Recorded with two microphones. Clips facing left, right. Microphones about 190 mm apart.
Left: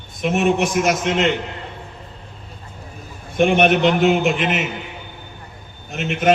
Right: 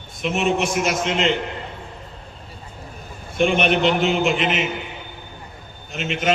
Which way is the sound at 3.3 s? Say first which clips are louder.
Left 3 dB; 50° left (ahead or behind).